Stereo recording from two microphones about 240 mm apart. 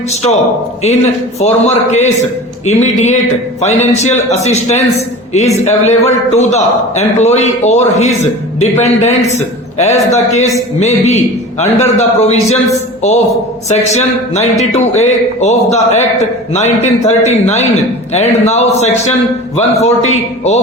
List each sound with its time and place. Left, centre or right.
1.4 s a man's voice: left
13.7 s a man's voice: left